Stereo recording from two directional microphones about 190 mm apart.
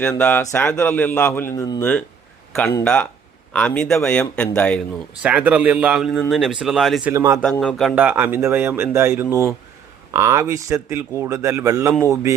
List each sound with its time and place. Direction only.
0.0 s a man's voice: 10° left (ahead or behind)
5.2 s a man's voice: 5° right (ahead or behind)
7.1 s a man's voice: 15° right (ahead or behind)
7.6 s a man's voice: 5° left (ahead or behind)
7.9 s a man's voice: 10° right (ahead or behind)